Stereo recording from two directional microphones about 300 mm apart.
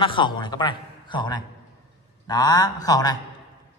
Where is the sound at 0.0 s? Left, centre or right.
Centre.